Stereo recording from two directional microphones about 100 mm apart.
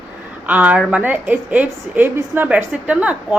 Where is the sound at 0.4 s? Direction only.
15° right (ahead or behind).